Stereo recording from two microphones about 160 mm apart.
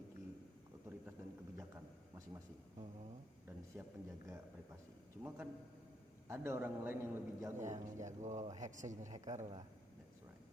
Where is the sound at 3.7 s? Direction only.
20° right (ahead or behind).